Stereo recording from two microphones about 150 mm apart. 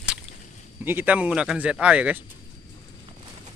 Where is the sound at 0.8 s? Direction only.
10° right (ahead or behind).